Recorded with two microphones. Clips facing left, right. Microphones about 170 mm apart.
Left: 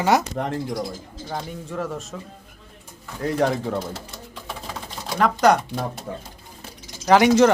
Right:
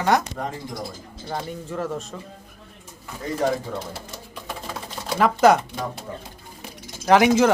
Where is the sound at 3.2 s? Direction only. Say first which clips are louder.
Left 4 dB; 65° left (ahead or behind).